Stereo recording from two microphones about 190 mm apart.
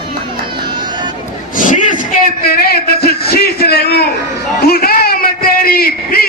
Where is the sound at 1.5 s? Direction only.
45° left (ahead or behind).